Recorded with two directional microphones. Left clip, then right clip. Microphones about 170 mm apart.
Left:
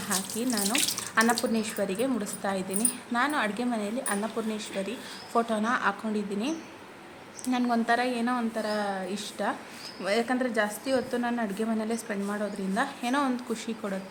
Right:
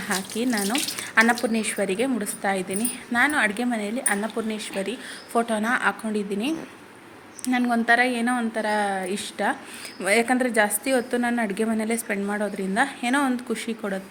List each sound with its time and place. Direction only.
0.1 s a woman's voice: 20° right (ahead or behind)